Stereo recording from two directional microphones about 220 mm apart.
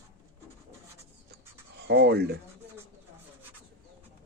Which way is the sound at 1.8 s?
50° right (ahead or behind).